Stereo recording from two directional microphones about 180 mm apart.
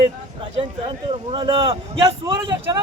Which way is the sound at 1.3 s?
30° right (ahead or behind).